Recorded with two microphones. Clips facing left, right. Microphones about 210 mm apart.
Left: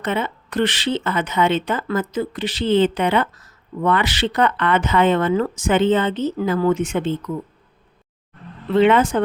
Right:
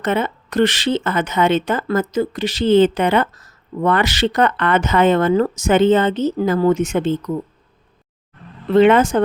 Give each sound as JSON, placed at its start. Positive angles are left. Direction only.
{"t": 0.0, "sound": "speech", "side_deg": -45}
{"t": 8.7, "sound": "speech", "side_deg": -45}